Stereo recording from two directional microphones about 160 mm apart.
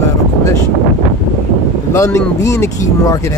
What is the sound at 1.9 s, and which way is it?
Speech, 20° left (ahead or behind).